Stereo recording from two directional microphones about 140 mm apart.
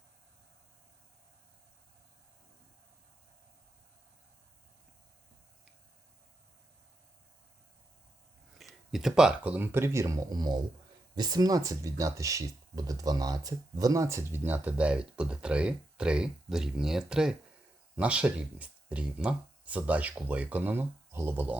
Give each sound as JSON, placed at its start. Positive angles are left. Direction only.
{"t": 8.5, "sound": "speech", "side_deg": 0}